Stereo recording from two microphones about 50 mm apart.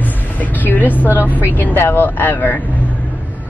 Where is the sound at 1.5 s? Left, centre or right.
Left.